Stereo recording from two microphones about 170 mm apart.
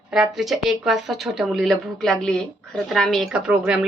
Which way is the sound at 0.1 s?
Centre (ahead or behind).